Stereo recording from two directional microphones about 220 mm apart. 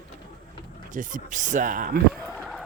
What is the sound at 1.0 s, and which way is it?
Speech, 35° right (ahead or behind).